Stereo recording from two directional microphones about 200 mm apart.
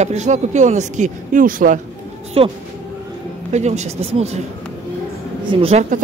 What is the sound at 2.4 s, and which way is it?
Speech, 30° right (ahead or behind).